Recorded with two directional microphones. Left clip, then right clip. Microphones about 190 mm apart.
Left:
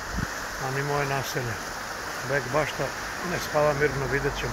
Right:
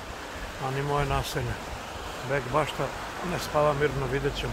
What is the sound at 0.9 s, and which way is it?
Speech, 15° right (ahead or behind).